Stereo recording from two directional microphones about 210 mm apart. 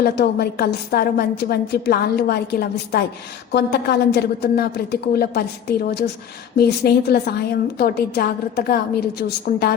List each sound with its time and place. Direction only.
0.0 s a woman's voice: 50° left (ahead or behind)